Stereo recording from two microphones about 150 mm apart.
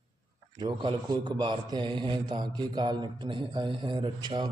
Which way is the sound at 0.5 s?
25° right (ahead or behind).